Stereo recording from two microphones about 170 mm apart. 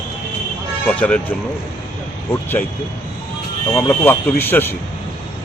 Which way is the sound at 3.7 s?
15° left (ahead or behind).